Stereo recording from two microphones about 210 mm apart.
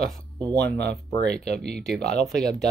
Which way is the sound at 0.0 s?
Centre (ahead or behind).